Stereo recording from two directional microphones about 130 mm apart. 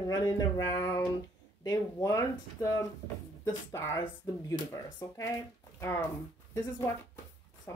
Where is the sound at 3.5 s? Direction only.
20° left (ahead or behind).